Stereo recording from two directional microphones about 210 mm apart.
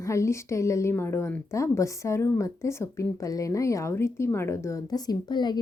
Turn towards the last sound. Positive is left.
turn(degrees=20)  # may be behind; listen again after turning